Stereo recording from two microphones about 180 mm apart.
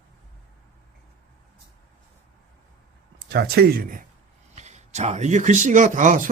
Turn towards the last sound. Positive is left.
turn(degrees=-45)  # may be behind; listen again after turning